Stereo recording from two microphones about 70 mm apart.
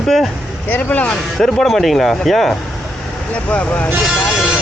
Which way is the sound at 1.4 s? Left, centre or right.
Centre.